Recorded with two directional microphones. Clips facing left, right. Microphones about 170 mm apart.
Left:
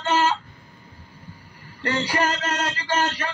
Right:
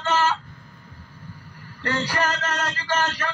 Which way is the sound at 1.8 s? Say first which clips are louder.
Left 1 dB; 15° left (ahead or behind).